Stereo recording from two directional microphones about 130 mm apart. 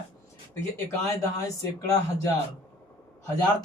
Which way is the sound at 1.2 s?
25° left (ahead or behind).